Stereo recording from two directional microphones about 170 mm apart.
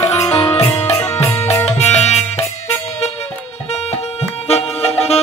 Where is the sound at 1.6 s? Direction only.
40° left (ahead or behind).